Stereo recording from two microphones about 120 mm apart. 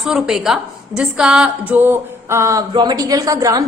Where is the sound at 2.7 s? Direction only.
35° right (ahead or behind).